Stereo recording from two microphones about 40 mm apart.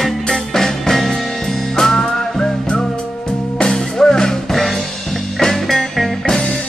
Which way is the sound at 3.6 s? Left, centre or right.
Centre.